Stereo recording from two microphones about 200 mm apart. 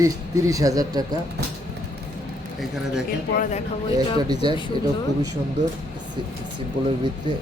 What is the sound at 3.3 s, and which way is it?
Speech, 40° left (ahead or behind).